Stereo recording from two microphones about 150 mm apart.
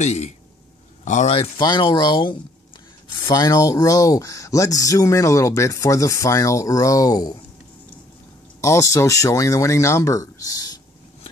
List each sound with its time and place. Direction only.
0.0 s speech: 50° left (ahead or behind)
1.6 s speech: 25° left (ahead or behind)
8.5 s speech: 20° left (ahead or behind)